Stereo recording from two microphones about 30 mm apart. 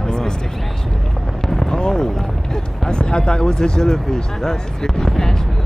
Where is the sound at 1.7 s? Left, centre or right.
Left.